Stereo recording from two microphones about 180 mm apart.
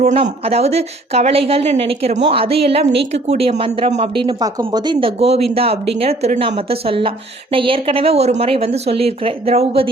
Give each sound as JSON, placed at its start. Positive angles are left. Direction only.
{"t": 0.0, "sound": "a woman's voice", "side_deg": -35}